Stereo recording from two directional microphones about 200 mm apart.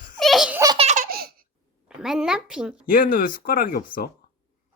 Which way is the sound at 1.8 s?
5° right (ahead or behind).